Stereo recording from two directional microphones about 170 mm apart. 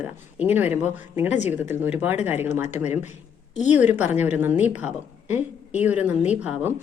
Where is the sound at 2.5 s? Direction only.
45° left (ahead or behind).